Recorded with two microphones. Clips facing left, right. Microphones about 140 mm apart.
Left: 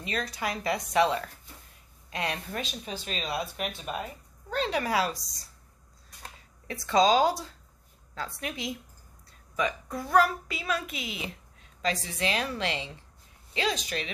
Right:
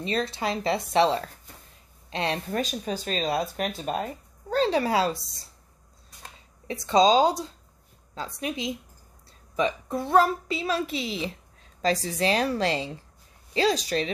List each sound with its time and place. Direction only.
0.0 s a child's voice: 30° right (ahead or behind)
2.5 s speech: 40° right (ahead or behind)
6.7 s a child's voice: 20° right (ahead or behind)